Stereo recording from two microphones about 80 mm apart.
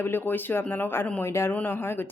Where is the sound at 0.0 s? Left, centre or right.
Left.